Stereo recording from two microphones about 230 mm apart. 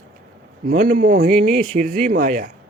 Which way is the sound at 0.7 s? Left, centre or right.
Right.